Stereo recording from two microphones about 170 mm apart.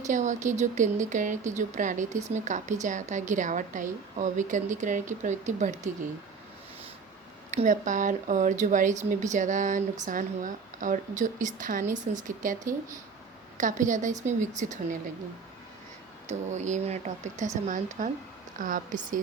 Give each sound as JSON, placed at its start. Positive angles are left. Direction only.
{"t": 0.1, "sound": "speech", "side_deg": -45}
{"t": 7.5, "sound": "speech", "side_deg": -45}
{"t": 16.5, "sound": "speech", "side_deg": -45}